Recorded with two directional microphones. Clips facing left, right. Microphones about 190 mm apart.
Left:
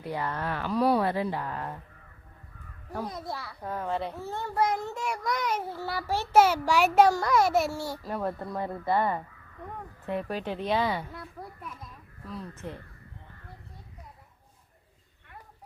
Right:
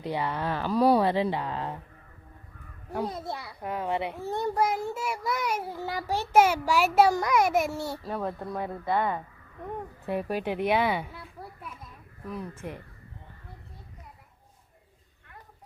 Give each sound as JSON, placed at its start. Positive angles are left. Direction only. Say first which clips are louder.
{"t": 0.0, "sound": "a child's voice", "louder": "right 2 dB", "side_deg": -15}
{"t": 0.4, "sound": "speech", "louder": "right 3 dB", "side_deg": -30}
{"t": 0.9, "sound": "speech", "louder": "right 3 dB", "side_deg": -20}
{"t": 2.9, "sound": "a child's voice", "louder": "right 3 dB", "side_deg": -25}
{"t": 6.7, "sound": "speech", "louder": "left 1 dB", "side_deg": 0}
{"t": 7.1, "sound": "a child's voice", "louder": "even", "side_deg": -15}
{"t": 8.0, "sound": "speech", "louder": "even", "side_deg": 0}
{"t": 10.1, "sound": "a child's voice", "louder": "right 2 dB", "side_deg": -10}
{"t": 12.3, "sound": "a child's voice", "louder": "right 2 dB", "side_deg": -10}